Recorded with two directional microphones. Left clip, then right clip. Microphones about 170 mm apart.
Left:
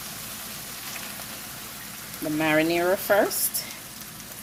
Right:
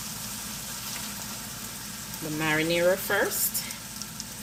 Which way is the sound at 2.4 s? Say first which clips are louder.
Left 2 dB; 65° left (ahead or behind).